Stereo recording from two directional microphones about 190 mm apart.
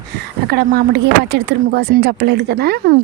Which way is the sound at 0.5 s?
60° right (ahead or behind).